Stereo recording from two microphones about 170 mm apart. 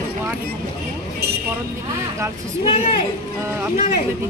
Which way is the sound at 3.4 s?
15° right (ahead or behind).